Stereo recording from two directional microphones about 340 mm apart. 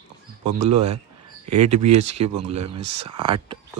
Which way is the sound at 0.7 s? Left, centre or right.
Right.